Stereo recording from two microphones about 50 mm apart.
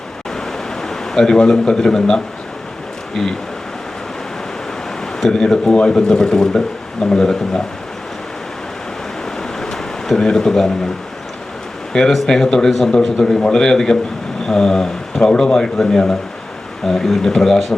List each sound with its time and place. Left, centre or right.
0.3 s pink noise: centre
3.2 s a man's voice: centre
5.2 s a man's voice: centre
9.4 s a sound: centre
11.9 s a man's voice: centre